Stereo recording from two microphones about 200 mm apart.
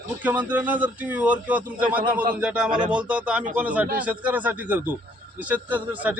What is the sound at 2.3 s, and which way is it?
A man's voice, 5° right (ahead or behind).